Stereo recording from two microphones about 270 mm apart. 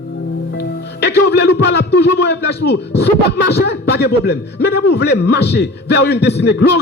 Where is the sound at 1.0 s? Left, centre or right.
Left.